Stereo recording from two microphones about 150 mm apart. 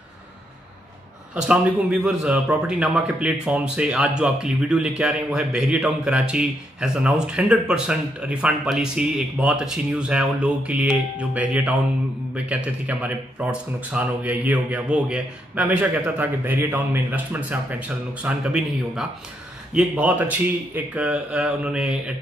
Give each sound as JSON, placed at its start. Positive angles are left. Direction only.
{"t": 1.3, "sound": "a man's voice", "side_deg": -10}